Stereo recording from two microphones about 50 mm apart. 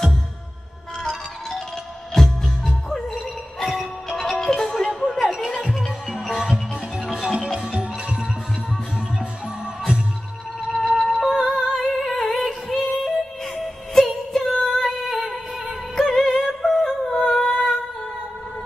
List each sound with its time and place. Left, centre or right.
1.0 s music: centre
5.2 s music: centre
5.6 s music: centre
10.8 s music: centre
11.6 s music: centre